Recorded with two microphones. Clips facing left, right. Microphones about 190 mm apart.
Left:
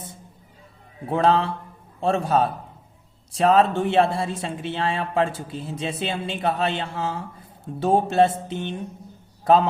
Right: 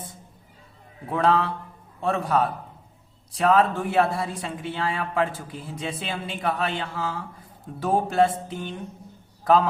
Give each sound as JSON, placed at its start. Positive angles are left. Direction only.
{"t": 1.0, "sound": "a man's voice", "side_deg": 25}